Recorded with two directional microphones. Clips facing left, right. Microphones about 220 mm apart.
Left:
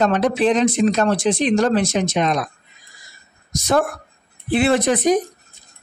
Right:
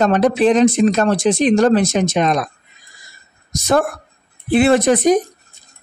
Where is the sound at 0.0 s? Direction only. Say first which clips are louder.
Right 3 dB; 45° right (ahead or behind).